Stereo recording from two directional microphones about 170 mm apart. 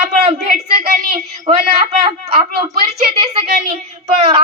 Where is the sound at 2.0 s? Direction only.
25° right (ahead or behind).